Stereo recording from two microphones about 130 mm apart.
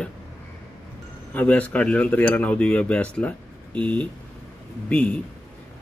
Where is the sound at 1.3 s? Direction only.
10° left (ahead or behind).